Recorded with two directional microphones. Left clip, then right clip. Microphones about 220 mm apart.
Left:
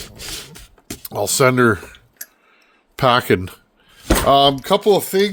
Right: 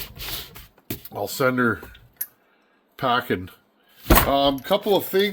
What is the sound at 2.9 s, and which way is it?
Speech, 65° left (ahead or behind).